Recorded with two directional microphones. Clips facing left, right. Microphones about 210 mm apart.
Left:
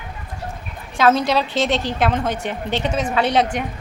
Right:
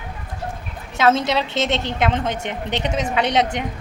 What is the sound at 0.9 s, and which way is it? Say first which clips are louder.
A woman's voice: left 1 dB; 20° right (ahead or behind).